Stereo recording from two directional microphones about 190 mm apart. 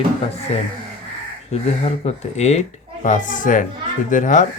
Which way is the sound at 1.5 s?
35° left (ahead or behind).